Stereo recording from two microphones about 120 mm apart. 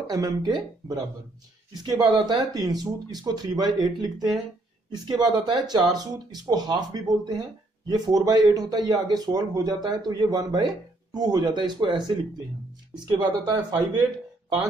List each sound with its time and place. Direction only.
0.0 s speech: 30° right (ahead or behind)
13.0 s speech: 35° right (ahead or behind)